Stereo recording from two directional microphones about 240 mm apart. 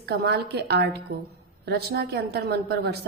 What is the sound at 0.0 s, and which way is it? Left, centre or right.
A woman's voice, right.